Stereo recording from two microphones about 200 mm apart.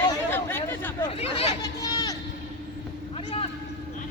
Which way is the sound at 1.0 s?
30° left (ahead or behind).